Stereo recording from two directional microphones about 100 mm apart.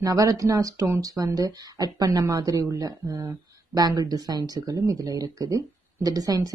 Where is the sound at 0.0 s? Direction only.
40° right (ahead or behind).